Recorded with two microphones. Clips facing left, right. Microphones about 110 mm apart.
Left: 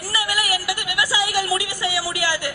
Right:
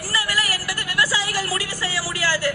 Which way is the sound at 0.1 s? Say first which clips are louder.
Left 2 dB; 15° left (ahead or behind).